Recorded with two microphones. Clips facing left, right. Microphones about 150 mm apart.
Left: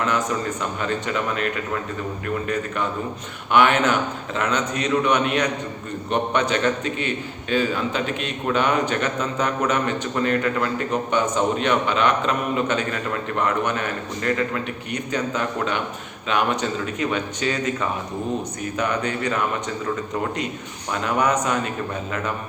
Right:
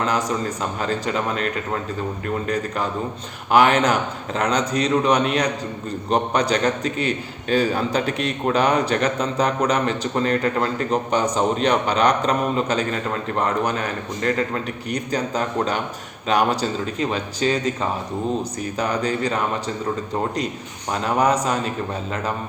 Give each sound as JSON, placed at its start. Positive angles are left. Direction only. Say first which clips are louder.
{"t": 0.0, "sound": "a man's voice", "louder": "right 1 dB", "side_deg": -35}
{"t": 20.9, "sound": "a man's voice", "louder": "right 2 dB", "side_deg": -35}